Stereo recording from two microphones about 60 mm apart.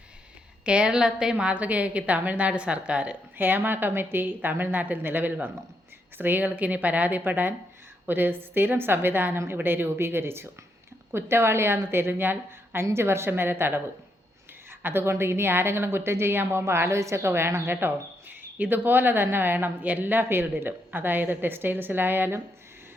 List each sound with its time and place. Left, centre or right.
0.6 s a woman's voice: centre
1.5 s a woman's voice: right
3.3 s a woman's voice: right
14.7 s a sound: right
15.2 s a woman's voice: right